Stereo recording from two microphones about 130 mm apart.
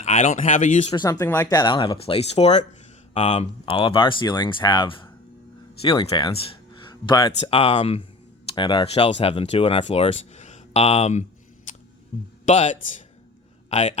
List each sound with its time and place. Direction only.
0.0 s speech: 70° left (ahead or behind)
0.9 s speech: 30° left (ahead or behind)
1.2 s speech: 20° left (ahead or behind)
1.5 s speech: 40° left (ahead or behind)
6.3 s music: 45° left (ahead or behind)
7.4 s speech: 50° left (ahead or behind)
8.4 s speech: 35° left (ahead or behind)
8.9 s speech: 55° left (ahead or behind); by 11.8 s 70° left (ahead or behind)
12.1 s a man's voice: 55° left (ahead or behind)